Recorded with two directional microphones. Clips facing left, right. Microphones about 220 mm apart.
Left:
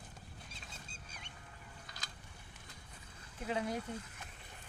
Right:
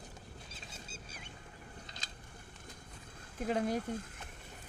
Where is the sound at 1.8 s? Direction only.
25° right (ahead or behind).